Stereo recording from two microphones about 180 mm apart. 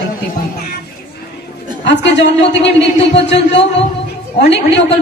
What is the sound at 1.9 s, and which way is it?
A man's voice, 75° left (ahead or behind).